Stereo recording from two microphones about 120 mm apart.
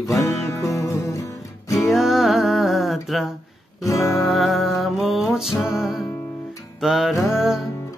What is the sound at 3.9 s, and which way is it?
Speech, centre (ahead or behind).